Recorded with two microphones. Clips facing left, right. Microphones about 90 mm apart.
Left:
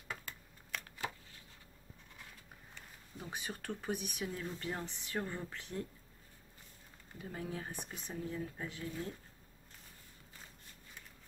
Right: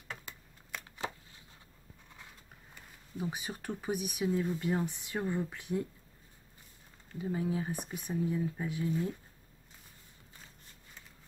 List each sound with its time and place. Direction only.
0.2 s a sound: 20° right (ahead or behind)
2.7 s speech: 10° right (ahead or behind)
7.2 s speech: 10° right (ahead or behind)